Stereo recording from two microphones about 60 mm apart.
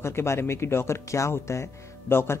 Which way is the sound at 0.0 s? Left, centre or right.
Left.